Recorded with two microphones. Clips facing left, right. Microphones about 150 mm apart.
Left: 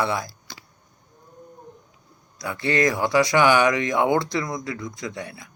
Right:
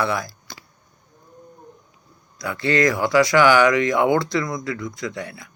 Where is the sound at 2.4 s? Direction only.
20° left (ahead or behind).